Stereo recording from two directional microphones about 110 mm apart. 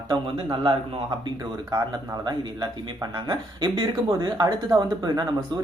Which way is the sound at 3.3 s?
40° right (ahead or behind).